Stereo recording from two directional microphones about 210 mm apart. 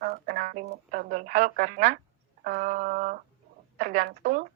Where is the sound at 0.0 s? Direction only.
45° right (ahead or behind).